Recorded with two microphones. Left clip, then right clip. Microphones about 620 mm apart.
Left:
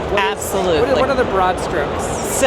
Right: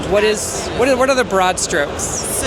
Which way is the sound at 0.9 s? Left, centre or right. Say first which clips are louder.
Right 1 dB; right.